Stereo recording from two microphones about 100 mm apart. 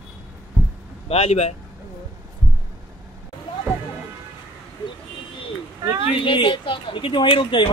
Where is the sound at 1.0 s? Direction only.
85° left.